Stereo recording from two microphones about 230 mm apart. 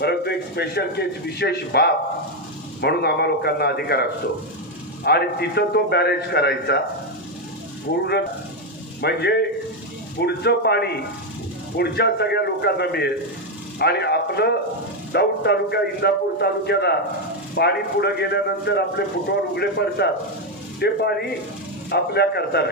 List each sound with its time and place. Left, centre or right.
0.0 s a man's voice: left
9.0 s a man's voice: left